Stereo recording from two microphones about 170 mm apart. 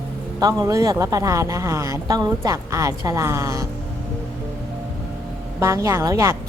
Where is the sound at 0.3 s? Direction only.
20° right (ahead or behind).